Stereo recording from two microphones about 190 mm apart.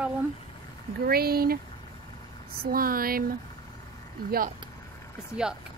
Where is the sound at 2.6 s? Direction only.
50° right (ahead or behind).